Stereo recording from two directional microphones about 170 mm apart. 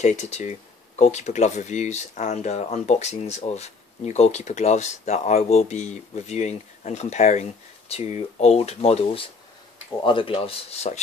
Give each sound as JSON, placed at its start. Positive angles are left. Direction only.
{"t": 0.0, "sound": "speech", "side_deg": 45}